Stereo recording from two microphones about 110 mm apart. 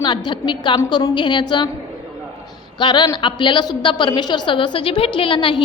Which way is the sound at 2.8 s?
45° left (ahead or behind).